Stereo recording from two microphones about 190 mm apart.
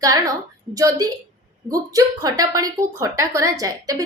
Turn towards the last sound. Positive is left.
turn(degrees=-20)  # may be behind; listen again after turning